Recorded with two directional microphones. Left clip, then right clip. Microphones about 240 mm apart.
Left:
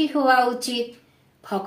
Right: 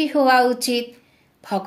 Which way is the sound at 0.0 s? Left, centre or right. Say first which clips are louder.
Right 3 dB; right.